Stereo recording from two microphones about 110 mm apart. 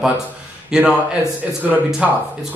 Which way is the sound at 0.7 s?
10° right (ahead or behind).